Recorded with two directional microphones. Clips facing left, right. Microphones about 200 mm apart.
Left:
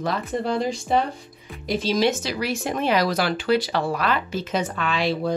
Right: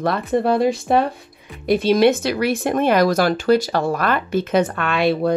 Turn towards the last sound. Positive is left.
turn(degrees=-60)  # may be behind; listen again after turning